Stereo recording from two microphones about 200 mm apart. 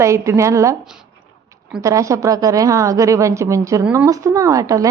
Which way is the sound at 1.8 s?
15° right (ahead or behind).